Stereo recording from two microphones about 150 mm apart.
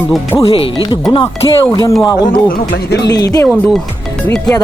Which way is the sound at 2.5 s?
80° left.